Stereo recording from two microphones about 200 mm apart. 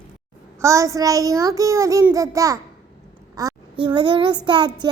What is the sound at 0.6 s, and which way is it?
Child singing, 15° right (ahead or behind).